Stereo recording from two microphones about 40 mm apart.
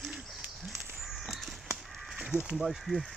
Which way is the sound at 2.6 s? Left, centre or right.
Centre.